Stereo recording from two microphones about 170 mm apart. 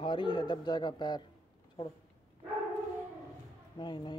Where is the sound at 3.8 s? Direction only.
25° left (ahead or behind).